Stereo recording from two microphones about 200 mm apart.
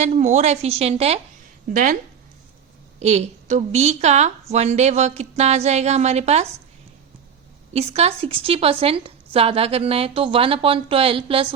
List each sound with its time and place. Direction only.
0.0 s a woman's voice: 35° right (ahead or behind)
3.0 s a woman's voice: 35° right (ahead or behind)
7.7 s a woman's voice: 30° right (ahead or behind)